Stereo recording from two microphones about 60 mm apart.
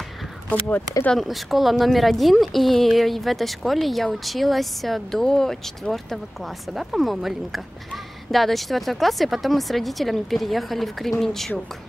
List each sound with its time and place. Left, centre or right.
0.5 s speech: left
1.1 s speech: centre